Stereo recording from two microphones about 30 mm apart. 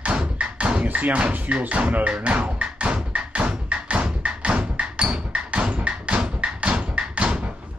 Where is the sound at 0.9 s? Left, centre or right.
Right.